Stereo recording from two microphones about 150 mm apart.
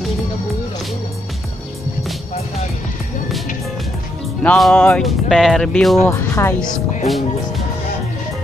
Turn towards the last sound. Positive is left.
turn(degrees=0)  # may be behind; listen again after turning